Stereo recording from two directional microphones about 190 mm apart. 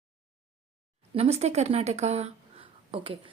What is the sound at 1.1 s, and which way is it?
Speech, 35° right (ahead or behind).